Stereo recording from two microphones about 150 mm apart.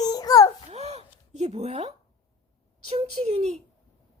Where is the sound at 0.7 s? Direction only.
45° right (ahead or behind).